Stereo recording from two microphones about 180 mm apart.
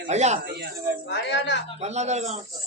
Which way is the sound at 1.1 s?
75° left (ahead or behind).